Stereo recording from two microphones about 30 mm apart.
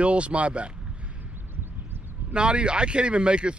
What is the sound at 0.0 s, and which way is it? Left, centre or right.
Speech, right.